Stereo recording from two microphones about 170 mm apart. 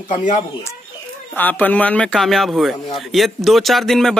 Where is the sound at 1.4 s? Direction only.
10° left (ahead or behind).